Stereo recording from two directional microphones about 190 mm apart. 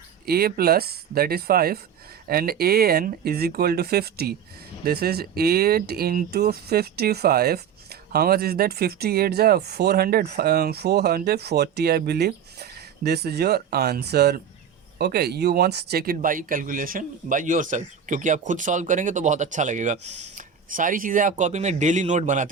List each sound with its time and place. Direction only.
0.3 s speech: 55° right (ahead or behind)